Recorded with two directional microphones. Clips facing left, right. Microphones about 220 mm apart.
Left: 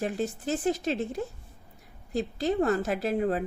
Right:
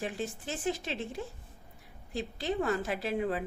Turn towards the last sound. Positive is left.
turn(degrees=45)  # may be behind; listen again after turning